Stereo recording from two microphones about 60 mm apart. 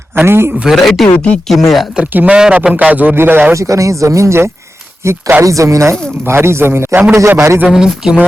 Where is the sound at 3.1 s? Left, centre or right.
Right.